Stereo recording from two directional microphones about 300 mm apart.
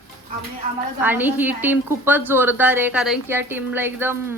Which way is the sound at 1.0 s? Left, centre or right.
Centre.